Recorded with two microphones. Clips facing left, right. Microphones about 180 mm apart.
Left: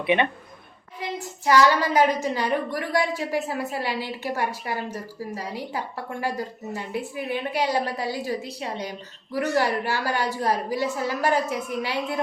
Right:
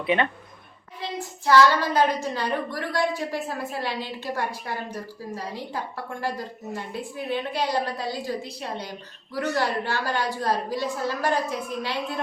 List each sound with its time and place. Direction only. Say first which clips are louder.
0.0 s a woman's voice: left 2 dB; 20° left (ahead or behind)